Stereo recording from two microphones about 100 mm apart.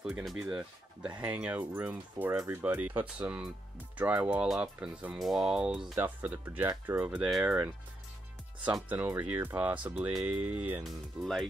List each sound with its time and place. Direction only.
0.4 s speech: 10° right (ahead or behind)
5.9 s speech: 15° right (ahead or behind)
8.8 s speech: 20° right (ahead or behind)
10.8 s speech: centre (ahead or behind)